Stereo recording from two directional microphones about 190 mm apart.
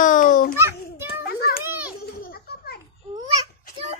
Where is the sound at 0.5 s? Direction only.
15° right (ahead or behind).